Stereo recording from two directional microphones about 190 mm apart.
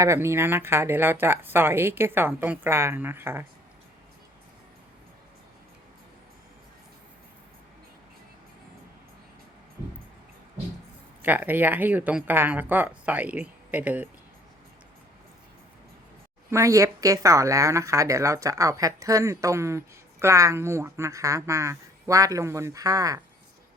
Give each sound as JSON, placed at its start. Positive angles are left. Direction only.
{"t": 0.0, "sound": "speech", "side_deg": -15}
{"t": 11.2, "sound": "speech", "side_deg": -10}
{"t": 16.5, "sound": "speech", "side_deg": -15}